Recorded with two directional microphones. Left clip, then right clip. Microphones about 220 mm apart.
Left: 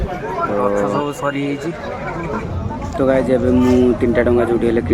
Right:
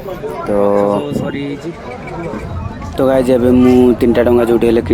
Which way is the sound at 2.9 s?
30° right (ahead or behind).